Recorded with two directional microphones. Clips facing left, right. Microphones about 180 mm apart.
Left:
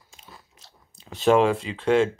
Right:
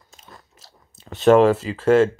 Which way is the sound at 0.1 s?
Centre (ahead or behind).